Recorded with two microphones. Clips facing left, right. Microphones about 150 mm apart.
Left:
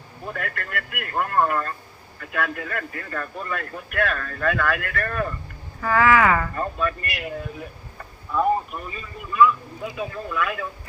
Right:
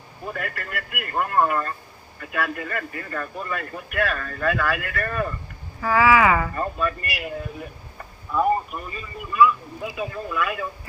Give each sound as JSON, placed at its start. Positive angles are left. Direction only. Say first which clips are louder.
{"t": 0.3, "sound": "speech", "louder": "even", "side_deg": -5}